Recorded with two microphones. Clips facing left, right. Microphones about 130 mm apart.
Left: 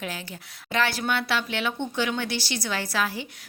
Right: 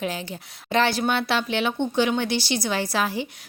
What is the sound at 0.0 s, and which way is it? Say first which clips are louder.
A woman's voice: right 6 dB; 20° right (ahead or behind).